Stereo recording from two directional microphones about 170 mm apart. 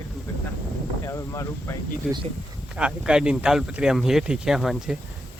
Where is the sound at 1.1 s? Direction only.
15° left (ahead or behind).